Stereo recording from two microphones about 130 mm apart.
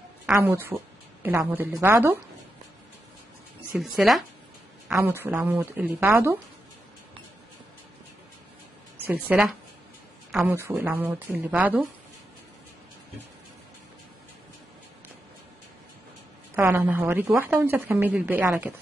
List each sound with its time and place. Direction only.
0.3 s a woman's voice: 15° right (ahead or behind)
3.7 s speech: 5° right (ahead or behind)
4.9 s a woman's voice: 15° right (ahead or behind)
9.0 s a woman's voice: 10° right (ahead or behind)
16.5 s a woman's voice: 15° right (ahead or behind)